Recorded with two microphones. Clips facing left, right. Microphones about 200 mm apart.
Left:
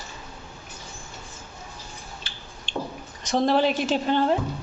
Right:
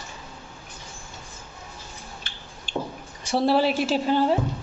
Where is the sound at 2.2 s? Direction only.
55° right (ahead or behind).